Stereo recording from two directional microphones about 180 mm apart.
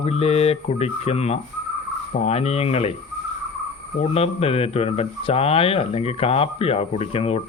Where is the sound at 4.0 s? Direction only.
35° left (ahead or behind).